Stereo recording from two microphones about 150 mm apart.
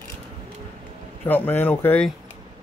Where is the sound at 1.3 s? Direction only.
10° left (ahead or behind).